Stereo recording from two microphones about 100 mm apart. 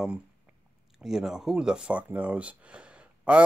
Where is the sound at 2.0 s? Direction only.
15° right (ahead or behind).